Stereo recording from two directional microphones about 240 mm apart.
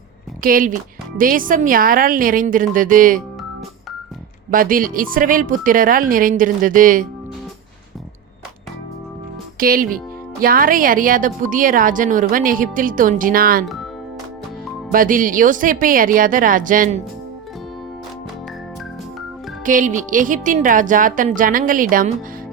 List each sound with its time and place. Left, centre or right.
0.4 s a woman's voice: right
4.5 s a woman's voice: right
9.6 s a woman's voice: right
14.9 s a woman's voice: right
19.6 s a woman's voice: right